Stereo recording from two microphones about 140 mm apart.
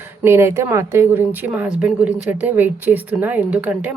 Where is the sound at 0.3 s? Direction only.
20° right (ahead or behind).